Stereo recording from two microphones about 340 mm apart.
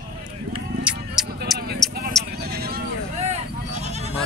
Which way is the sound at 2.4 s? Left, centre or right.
Right.